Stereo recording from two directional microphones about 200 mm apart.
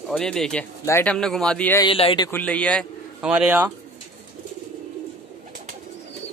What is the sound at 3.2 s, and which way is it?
Speech, 5° right (ahead or behind).